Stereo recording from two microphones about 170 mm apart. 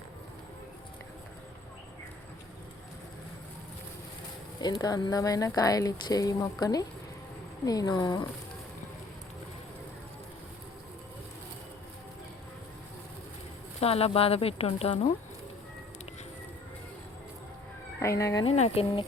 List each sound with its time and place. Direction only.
4.6 s speech: 25° left (ahead or behind)
13.7 s speech: 35° left (ahead or behind)
18.0 s speech: 15° left (ahead or behind)
18.4 s speech: 40° left (ahead or behind)